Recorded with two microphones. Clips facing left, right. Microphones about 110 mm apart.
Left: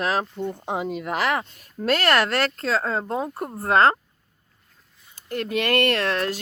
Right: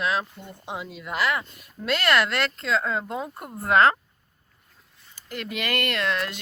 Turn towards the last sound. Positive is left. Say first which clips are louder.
# left 4 dB
turn(degrees=40)  # may be behind; listen again after turning